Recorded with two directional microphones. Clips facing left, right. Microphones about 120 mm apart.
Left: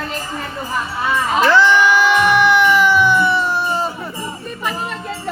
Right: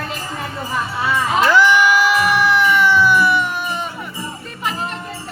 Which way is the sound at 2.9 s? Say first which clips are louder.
Even; 20° left (ahead or behind).